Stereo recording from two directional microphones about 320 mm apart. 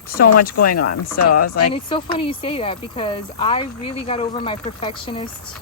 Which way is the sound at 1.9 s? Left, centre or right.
Centre.